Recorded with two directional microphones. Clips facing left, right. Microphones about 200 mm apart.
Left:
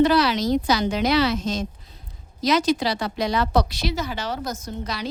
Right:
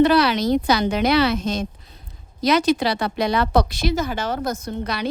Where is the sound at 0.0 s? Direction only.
60° right (ahead or behind).